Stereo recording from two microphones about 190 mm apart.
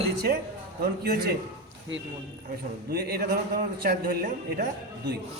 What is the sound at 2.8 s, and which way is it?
A man's voice, 55° right (ahead or behind).